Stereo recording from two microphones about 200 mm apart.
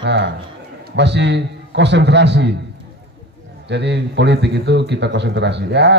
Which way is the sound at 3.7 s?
60° right (ahead or behind).